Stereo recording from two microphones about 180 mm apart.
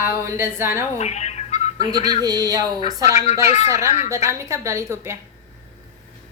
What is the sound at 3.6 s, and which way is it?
Speech, 15° right (ahead or behind).